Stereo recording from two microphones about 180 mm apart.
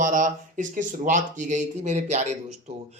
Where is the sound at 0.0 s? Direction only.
45° right (ahead or behind).